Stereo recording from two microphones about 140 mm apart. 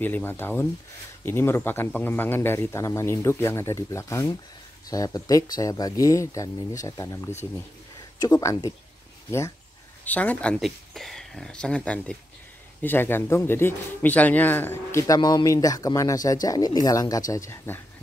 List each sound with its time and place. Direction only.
0.0 s speech: 15° left (ahead or behind)
10.0 s speech: 10° left (ahead or behind)
15.1 s speech: 30° left (ahead or behind)